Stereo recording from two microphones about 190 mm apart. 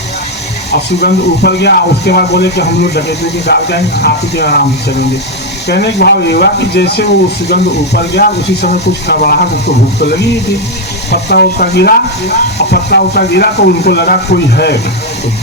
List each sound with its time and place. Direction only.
0.7 s speech: 60° left (ahead or behind)